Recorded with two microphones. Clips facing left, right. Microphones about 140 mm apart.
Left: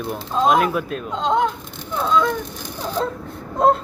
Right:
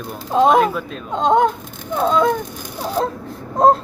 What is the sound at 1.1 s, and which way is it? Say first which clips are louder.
Speech: right 5 dB; 50° right (ahead or behind).